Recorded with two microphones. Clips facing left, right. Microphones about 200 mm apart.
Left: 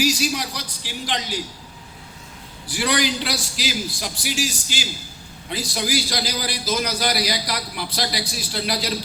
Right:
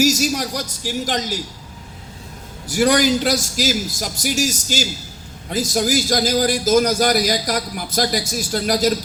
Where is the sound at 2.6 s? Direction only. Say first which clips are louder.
Right 7 dB; 45° right (ahead or behind).